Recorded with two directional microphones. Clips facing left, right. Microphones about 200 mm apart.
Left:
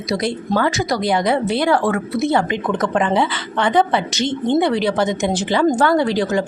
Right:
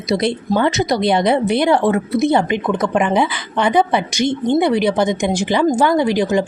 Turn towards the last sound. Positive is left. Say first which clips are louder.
# right 2 dB
turn(degrees=-15)  # may be behind; listen again after turning